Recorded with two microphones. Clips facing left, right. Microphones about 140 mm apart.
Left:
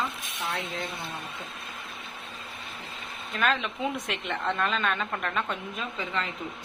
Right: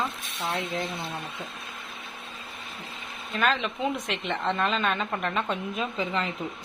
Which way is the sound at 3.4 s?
Centre (ahead or behind).